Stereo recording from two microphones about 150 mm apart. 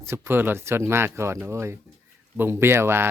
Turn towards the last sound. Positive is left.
turn(degrees=-15)  # may be behind; listen again after turning